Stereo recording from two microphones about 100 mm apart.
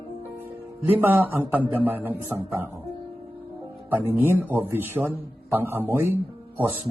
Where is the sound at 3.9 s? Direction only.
20° right (ahead or behind).